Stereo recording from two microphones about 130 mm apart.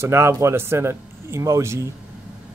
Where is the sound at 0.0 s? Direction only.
20° right (ahead or behind).